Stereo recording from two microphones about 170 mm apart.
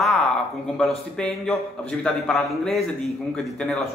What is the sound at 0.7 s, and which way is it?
A man's voice, 5° left (ahead or behind).